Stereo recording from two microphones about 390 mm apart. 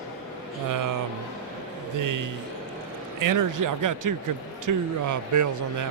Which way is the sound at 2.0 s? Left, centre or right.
Right.